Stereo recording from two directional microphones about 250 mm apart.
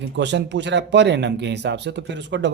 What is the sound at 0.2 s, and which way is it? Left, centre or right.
Speech, right.